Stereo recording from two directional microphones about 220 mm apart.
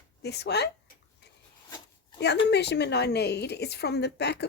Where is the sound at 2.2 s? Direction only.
50° left (ahead or behind).